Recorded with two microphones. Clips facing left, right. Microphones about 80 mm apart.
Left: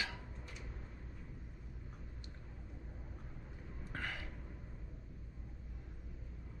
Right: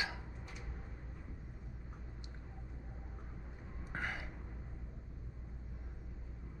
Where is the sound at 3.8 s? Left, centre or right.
Centre.